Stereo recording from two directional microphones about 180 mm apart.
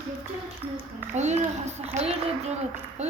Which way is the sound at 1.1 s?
40° right (ahead or behind).